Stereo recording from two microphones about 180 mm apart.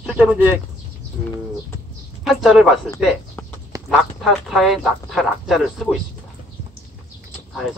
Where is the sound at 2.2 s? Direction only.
Centre (ahead or behind).